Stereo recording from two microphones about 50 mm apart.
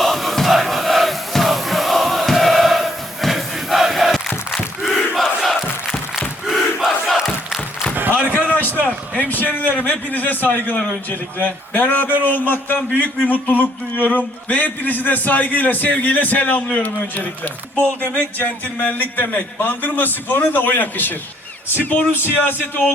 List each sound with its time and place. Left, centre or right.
0.0 s crowd: centre
4.8 s battle cry: centre
7.2 s crowd: centre
8.1 s a sound: left
9.1 s a man's voice: left